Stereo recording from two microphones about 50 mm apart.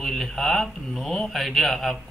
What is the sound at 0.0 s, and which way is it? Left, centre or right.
Speech, centre.